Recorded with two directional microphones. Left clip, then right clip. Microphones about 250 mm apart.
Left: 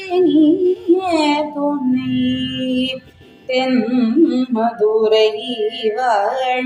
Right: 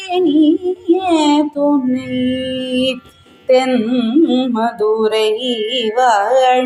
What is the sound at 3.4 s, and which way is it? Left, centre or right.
Carnatic music, right.